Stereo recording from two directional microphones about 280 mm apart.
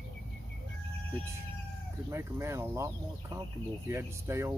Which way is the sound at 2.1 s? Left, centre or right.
Centre.